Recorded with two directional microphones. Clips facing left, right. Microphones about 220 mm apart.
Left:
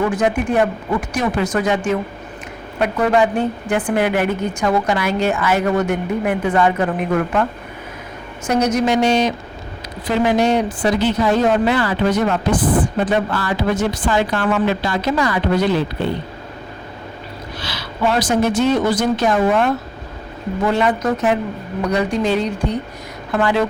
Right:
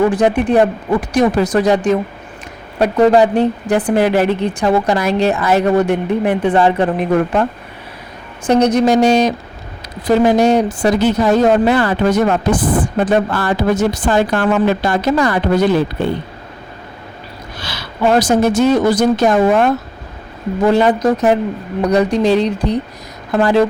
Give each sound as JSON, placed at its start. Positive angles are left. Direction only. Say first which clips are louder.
{"t": 0.1, "sound": "a woman's voice", "louder": "right 5 dB", "side_deg": -35}
{"t": 8.6, "sound": "a woman's voice", "louder": "right 4 dB", "side_deg": -35}
{"t": 17.6, "sound": "speech", "louder": "right 3 dB", "side_deg": -45}
{"t": 20.7, "sound": "a woman's voice", "louder": "right 6 dB", "side_deg": -35}